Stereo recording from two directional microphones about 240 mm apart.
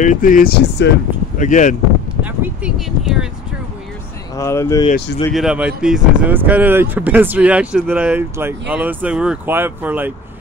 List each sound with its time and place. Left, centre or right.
0.0 s speech: left
1.4 s speech: left
2.2 s speech: centre
4.4 s speech: centre
5.3 s speech: centre